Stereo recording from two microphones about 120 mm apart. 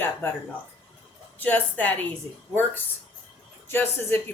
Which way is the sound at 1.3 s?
15° left (ahead or behind).